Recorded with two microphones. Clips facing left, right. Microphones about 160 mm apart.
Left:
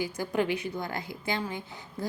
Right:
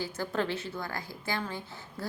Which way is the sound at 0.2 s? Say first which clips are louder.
Left 3 dB; 15° left (ahead or behind).